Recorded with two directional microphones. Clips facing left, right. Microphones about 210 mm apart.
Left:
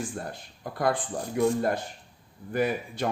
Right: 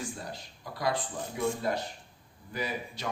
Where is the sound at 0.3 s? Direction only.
55° left (ahead or behind).